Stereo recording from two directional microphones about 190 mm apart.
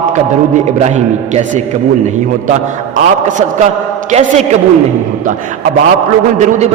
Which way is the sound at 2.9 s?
40° right (ahead or behind).